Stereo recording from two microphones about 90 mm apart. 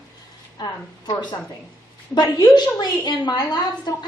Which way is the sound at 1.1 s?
50° left (ahead or behind).